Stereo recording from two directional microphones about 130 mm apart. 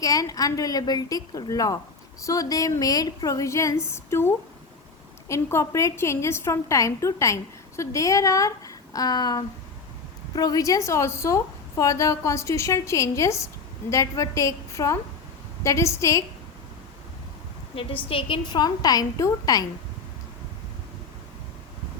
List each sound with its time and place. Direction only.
0.0 s a woman's voice: 25° left (ahead or behind)
17.7 s a woman's voice: 45° left (ahead or behind); by 19.6 s 30° left (ahead or behind)